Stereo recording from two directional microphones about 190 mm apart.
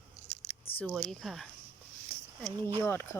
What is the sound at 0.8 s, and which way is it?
Speech, centre (ahead or behind).